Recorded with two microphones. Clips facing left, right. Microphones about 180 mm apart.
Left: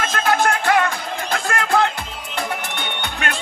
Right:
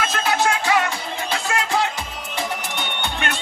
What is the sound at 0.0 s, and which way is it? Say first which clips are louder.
Music: left 2 dB; 50° left (ahead or behind).